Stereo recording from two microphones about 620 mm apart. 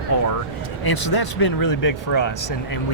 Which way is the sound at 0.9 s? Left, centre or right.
Left.